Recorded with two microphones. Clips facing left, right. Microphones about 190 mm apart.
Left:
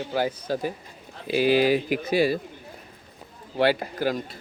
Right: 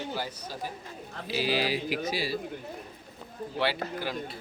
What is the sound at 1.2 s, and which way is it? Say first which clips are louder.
Speech: left 9 dB; 55° left (ahead or behind).